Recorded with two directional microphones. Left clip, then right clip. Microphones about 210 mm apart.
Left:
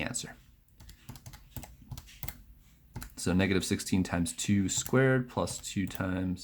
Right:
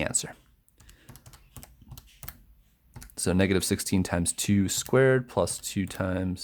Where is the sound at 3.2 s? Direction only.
40° right (ahead or behind).